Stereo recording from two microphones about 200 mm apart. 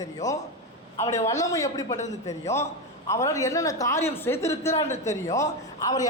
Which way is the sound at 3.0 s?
15° left (ahead or behind).